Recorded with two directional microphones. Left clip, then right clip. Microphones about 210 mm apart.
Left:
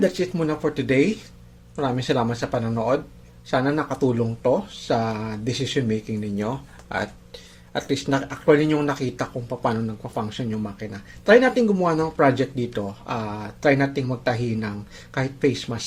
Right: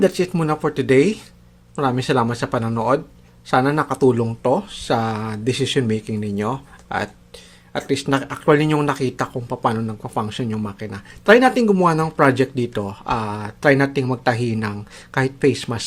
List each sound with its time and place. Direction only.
0.0 s speech: 35° right (ahead or behind)